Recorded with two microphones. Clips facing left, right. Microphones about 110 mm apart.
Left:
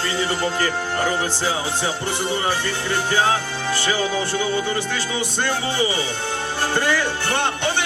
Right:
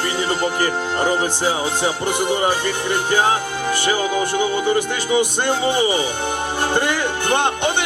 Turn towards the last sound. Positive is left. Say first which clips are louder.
# right 4 dB
turn(degrees=-20)  # may be behind; listen again after turning